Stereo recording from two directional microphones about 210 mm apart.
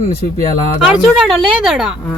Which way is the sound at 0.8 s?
5° right (ahead or behind).